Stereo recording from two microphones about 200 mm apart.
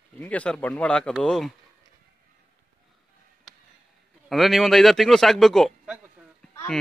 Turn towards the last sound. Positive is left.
turn(degrees=10)  # may be behind; listen again after turning